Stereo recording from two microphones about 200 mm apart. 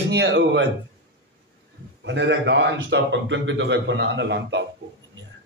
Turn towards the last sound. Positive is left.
turn(degrees=-65)  # may be behind; listen again after turning